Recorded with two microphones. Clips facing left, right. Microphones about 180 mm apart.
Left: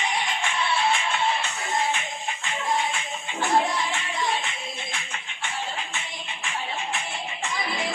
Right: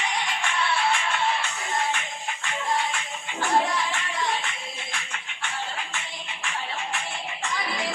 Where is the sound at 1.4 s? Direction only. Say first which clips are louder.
Left 1 dB; 20° left (ahead or behind).